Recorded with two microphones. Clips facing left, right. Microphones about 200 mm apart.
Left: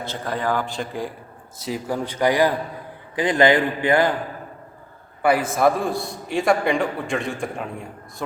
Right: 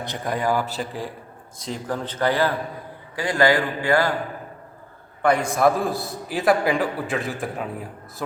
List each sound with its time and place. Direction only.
0.0 s a man's voice: 15° right (ahead or behind); by 4.1 s 20° left (ahead or behind)
5.2 s a man's voice: 5° left (ahead or behind)